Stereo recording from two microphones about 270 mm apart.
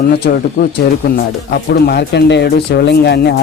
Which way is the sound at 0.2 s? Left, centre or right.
Left.